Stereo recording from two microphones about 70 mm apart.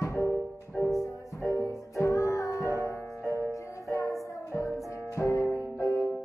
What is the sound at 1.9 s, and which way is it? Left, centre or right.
Music, left.